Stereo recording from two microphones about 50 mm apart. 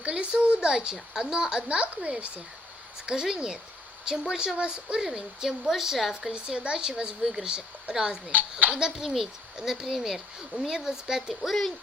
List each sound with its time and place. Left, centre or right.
0.0 s a woman's voice: right; by 6.1 s centre
6.3 s a woman's voice: centre
9.0 s speech: centre